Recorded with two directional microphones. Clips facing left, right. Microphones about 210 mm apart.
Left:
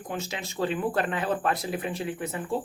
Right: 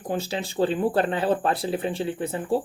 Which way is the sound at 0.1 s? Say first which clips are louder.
Right 7 dB; 35° right (ahead or behind).